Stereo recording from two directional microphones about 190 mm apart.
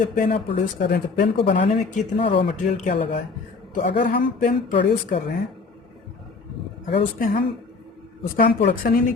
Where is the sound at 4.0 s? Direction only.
45° left (ahead or behind).